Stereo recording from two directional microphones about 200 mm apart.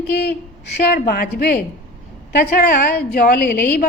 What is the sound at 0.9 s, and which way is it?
A woman's voice, 45° left (ahead or behind).